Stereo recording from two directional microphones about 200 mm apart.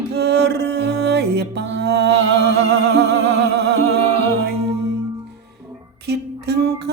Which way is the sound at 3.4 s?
55° right (ahead or behind).